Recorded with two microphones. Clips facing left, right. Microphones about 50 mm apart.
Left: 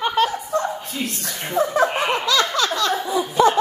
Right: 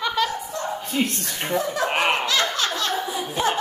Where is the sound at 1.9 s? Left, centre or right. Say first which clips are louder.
Even; right.